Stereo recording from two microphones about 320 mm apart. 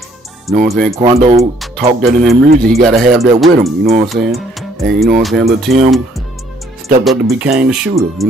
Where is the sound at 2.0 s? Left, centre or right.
Centre.